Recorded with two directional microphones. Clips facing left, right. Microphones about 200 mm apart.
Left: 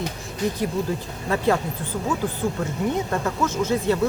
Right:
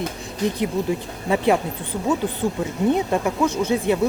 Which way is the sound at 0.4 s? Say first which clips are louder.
Right 2 dB; 20° right (ahead or behind).